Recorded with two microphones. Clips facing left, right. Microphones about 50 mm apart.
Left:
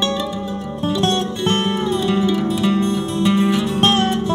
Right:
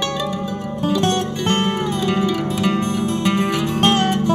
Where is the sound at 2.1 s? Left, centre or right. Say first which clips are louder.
Left 2 dB; right.